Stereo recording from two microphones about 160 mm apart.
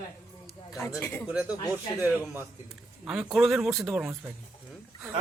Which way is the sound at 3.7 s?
20° right (ahead or behind).